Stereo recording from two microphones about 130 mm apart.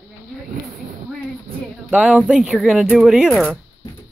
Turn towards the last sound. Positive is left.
turn(degrees=-5)  # may be behind; listen again after turning